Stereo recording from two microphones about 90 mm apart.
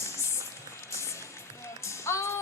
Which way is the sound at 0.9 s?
35° left (ahead or behind).